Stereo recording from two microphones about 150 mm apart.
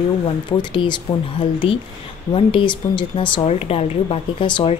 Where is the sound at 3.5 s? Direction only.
45° left (ahead or behind).